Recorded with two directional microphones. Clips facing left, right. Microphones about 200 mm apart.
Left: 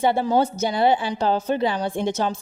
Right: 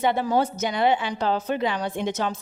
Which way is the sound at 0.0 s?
30° left (ahead or behind).